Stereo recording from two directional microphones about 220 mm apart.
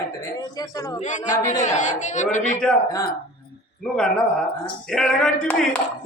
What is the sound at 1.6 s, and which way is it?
Speech, 35° left (ahead or behind).